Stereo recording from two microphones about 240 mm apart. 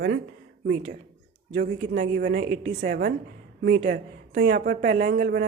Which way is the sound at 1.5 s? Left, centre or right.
Right.